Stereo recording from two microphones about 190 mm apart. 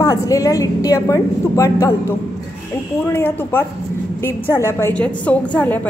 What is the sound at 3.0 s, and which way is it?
Speech, 10° left (ahead or behind).